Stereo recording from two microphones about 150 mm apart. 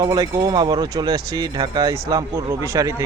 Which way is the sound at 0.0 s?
25° right (ahead or behind).